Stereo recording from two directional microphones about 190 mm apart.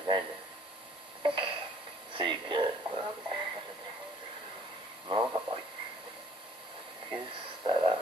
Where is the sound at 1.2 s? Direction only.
25° right (ahead or behind).